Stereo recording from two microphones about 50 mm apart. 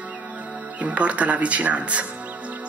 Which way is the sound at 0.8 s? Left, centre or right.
Right.